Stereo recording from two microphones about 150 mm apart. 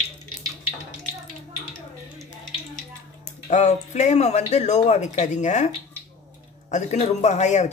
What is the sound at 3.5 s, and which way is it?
Speech, 50° left (ahead or behind).